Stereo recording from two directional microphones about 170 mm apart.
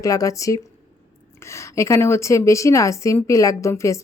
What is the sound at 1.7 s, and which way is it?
Speech, 15° left (ahead or behind).